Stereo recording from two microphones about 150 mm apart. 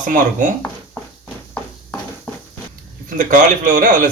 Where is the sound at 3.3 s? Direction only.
60° right (ahead or behind).